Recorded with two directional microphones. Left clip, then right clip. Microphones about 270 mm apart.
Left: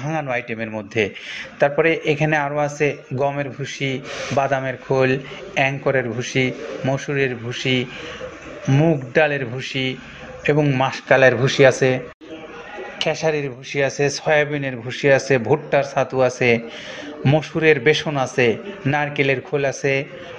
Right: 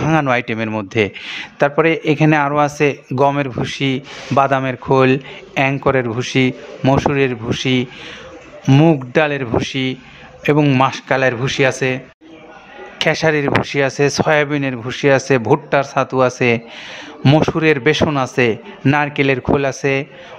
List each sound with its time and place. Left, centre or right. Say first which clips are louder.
0.0 s a man's voice: right 8 dB; right; by 12.0 s centre
13.0 s a man's voice: right 6 dB; right